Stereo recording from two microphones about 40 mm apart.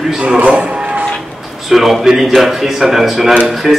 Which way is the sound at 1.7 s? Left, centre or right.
Centre.